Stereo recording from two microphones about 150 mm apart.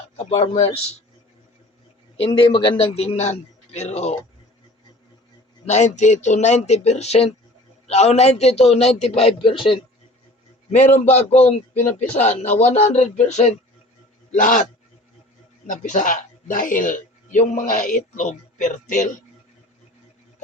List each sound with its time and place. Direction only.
0.2 s a man's voice: 40° left (ahead or behind)
2.1 s a man's voice: 35° left (ahead or behind)
5.6 s a man's voice: 50° left (ahead or behind)
10.7 s a man's voice: 50° left (ahead or behind)
14.3 s speech: 60° left (ahead or behind)
15.6 s speech: 60° left (ahead or behind)